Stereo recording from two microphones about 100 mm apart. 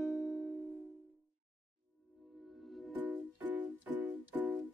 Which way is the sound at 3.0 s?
15° right (ahead or behind).